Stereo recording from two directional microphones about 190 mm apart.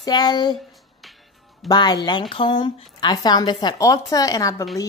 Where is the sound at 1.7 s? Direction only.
20° left (ahead or behind).